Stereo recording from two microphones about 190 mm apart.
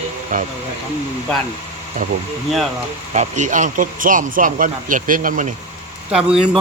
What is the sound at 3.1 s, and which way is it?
Speech, 40° right (ahead or behind).